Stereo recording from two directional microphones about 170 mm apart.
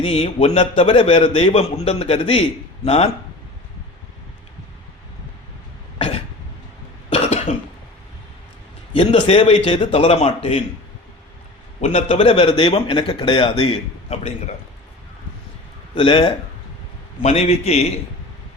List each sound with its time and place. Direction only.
0.0 s a man's voice: 35° left (ahead or behind)
6.0 s cough: 35° left (ahead or behind)
8.9 s a man's voice: 35° left (ahead or behind)
11.8 s a man's voice: 40° left (ahead or behind)
14.1 s a man's voice: 40° left (ahead or behind)
16.0 s a man's voice: 30° left (ahead or behind)